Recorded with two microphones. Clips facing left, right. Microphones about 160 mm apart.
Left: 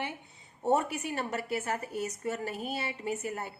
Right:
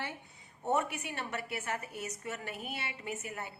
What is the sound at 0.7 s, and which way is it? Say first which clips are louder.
A woman's voice: left 4 dB; 35° left (ahead or behind).